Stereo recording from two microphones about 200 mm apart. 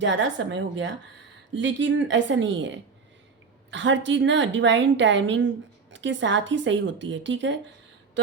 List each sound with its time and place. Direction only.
0.0 s a woman's voice: 70° right (ahead or behind)